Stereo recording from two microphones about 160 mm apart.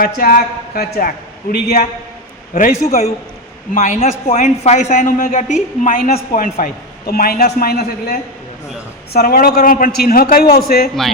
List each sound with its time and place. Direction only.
0.0 s a man's voice: 65° left (ahead or behind)
2.8 s a woman's voice: 45° left (ahead or behind); by 10.8 s 70° left (ahead or behind)